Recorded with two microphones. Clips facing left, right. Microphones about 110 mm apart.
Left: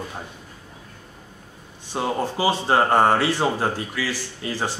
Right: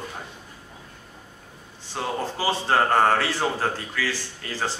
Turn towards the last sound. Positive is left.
turn(degrees=15)  # may be behind; listen again after turning